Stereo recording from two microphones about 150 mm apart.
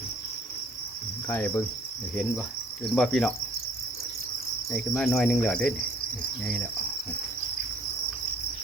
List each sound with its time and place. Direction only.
1.3 s cricket: 10° left (ahead or behind)
2.9 s cricket: centre (ahead or behind)
4.7 s cricket: 5° left (ahead or behind)